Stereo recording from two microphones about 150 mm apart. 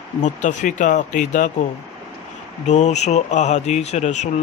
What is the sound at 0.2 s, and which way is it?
Speech, 55° left (ahead or behind).